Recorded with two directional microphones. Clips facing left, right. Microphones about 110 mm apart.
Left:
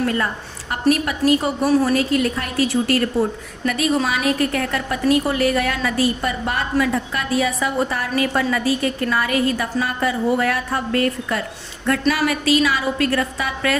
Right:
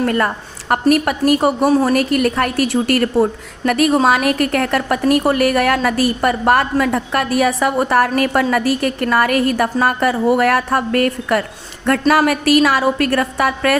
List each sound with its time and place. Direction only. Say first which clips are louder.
0.0 s a woman's voice: right 4 dB; 55° right (ahead or behind)
11.9 s a woman's voice: right 5 dB; 50° right (ahead or behind)